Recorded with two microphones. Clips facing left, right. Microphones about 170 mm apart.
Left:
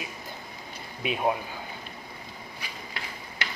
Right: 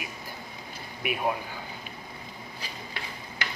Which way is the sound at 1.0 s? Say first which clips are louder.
Left 1 dB; 20° left (ahead or behind).